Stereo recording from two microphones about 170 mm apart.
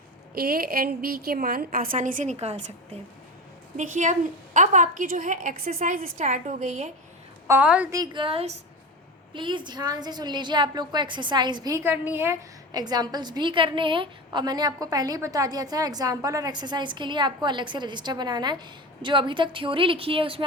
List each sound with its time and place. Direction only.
0.3 s a woman's voice: 60° right (ahead or behind); by 2.7 s 40° right (ahead or behind)
3.8 s a woman's voice: 45° right (ahead or behind)
7.4 s a woman's voice: 10° right (ahead or behind)
7.9 s a woman's voice: 20° right (ahead or behind)